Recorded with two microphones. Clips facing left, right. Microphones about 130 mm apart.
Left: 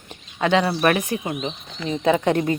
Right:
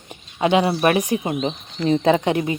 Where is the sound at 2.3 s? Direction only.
15° right (ahead or behind).